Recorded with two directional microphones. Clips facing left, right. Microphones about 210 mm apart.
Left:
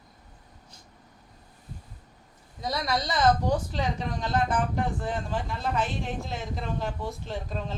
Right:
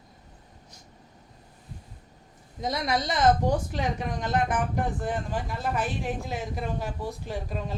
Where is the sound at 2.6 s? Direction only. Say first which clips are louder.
Right 1 dB; 20° right (ahead or behind).